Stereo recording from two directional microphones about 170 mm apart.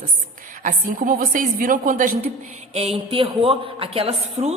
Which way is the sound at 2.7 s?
40° right (ahead or behind).